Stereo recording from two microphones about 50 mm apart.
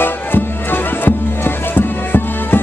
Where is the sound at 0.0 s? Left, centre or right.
Left.